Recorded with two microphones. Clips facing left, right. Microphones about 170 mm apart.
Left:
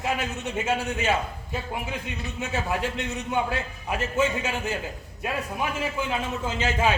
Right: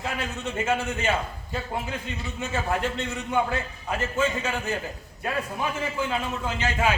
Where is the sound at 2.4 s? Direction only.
15° left (ahead or behind).